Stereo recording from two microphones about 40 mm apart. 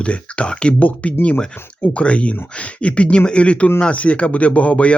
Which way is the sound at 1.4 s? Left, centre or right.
Left.